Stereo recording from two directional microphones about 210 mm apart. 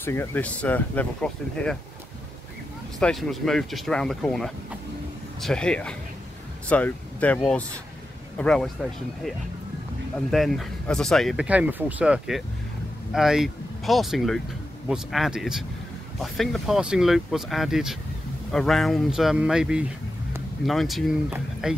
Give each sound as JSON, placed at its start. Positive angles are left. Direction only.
{"t": 0.0, "sound": "speech", "side_deg": 10}
{"t": 3.0, "sound": "speech", "side_deg": 0}
{"t": 10.1, "sound": "speech", "side_deg": 0}